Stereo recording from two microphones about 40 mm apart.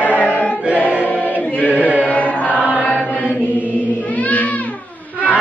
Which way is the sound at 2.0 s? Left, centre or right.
Left.